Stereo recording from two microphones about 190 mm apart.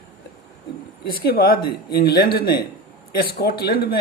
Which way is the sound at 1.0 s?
55° left (ahead or behind).